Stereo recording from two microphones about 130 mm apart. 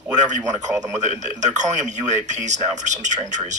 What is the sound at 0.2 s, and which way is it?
Speech, 65° right (ahead or behind).